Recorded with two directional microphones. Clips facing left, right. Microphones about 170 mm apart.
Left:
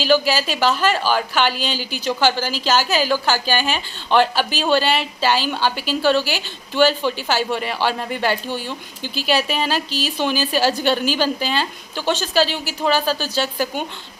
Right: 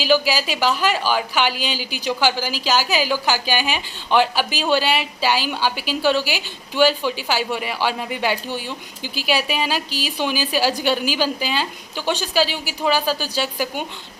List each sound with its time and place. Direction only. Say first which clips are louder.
0.0 s a woman's voice: left 1 dB; 10° right (ahead or behind)